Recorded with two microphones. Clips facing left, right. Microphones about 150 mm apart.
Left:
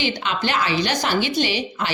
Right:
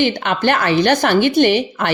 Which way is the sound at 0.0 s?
55° right (ahead or behind).